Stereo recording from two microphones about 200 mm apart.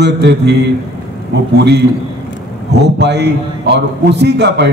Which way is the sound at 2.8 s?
55° right (ahead or behind).